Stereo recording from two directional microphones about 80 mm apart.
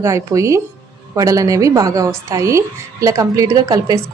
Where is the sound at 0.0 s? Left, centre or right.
Right.